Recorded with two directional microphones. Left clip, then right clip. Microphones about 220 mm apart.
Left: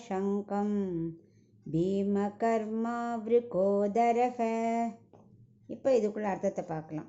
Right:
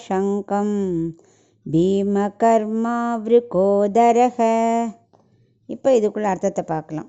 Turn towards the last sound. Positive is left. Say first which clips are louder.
# right 12 dB
turn(degrees=-50)  # may be behind; listen again after turning